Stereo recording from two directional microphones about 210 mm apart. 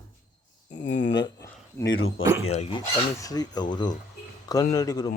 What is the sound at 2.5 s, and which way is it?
Speech, 30° left (ahead or behind).